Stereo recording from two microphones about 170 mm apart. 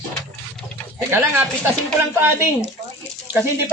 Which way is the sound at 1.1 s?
15° right (ahead or behind).